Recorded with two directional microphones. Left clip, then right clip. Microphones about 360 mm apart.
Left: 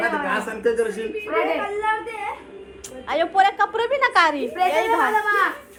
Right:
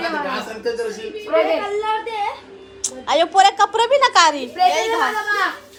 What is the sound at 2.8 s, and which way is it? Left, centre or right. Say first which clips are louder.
A woman's voice: right 5 dB; centre.